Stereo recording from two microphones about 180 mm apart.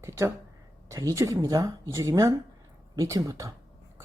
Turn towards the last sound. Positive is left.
turn(degrees=-20)  # may be behind; listen again after turning